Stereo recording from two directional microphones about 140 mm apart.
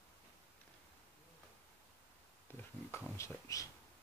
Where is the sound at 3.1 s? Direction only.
20° left (ahead or behind).